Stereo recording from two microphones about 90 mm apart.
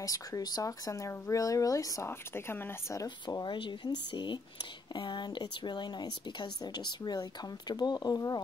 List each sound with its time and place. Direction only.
0.0 s speech: 40° left (ahead or behind)
2.0 s a woman's voice: 25° left (ahead or behind)
3.0 s speech: 45° left (ahead or behind)
3.4 s a woman's voice: 65° left (ahead or behind); by 8.4 s 45° left (ahead or behind)